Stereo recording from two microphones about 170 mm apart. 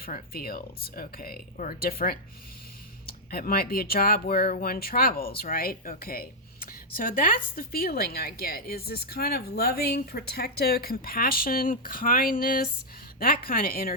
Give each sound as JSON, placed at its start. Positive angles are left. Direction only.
{"t": 0.0, "sound": "a woman's voice", "side_deg": 60}